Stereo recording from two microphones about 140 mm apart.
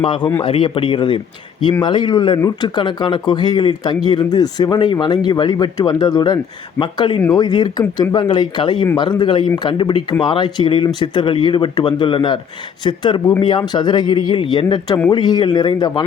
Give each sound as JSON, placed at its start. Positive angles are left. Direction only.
{"t": 0.0, "sound": "speech", "side_deg": 35}
{"t": 7.2, "sound": "speech", "side_deg": 25}